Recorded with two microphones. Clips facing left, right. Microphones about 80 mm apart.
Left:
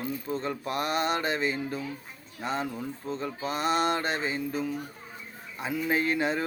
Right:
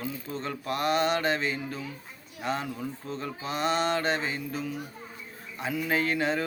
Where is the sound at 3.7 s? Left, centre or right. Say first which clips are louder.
Left 1 dB; centre.